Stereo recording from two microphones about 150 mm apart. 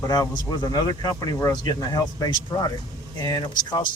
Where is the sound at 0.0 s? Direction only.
25° left (ahead or behind).